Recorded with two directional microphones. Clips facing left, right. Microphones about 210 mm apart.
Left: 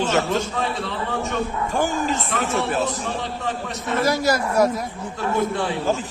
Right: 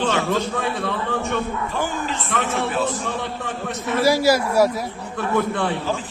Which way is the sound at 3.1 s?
55° right (ahead or behind).